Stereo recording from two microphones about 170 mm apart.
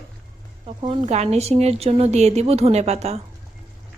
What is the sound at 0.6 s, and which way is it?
A woman's voice, 35° right (ahead or behind).